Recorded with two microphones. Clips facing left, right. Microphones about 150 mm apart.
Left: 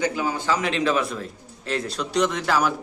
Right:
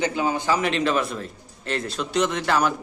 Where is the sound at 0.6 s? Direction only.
Centre (ahead or behind).